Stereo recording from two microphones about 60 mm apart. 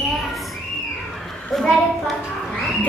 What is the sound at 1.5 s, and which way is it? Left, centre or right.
Speech, centre.